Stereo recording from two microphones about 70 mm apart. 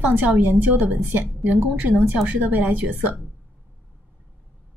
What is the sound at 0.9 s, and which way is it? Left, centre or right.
Speech, centre.